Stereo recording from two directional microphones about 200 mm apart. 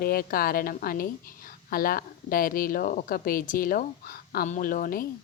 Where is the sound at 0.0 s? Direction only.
50° left (ahead or behind).